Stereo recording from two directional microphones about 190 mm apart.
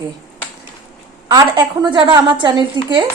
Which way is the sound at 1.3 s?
20° right (ahead or behind).